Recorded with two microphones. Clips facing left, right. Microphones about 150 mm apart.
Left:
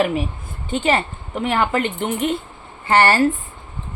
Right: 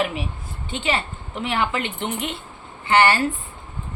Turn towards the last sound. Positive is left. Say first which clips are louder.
# left 2 dB
turn(degrees=40)  # may be behind; listen again after turning